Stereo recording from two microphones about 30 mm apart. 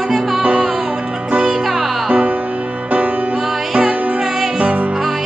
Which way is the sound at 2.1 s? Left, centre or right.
Right.